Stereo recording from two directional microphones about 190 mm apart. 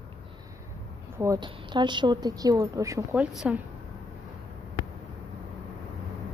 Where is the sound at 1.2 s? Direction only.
20° right (ahead or behind); by 3.6 s 5° right (ahead or behind).